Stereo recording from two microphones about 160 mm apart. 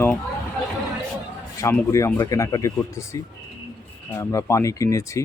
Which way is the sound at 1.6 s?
20° left (ahead or behind).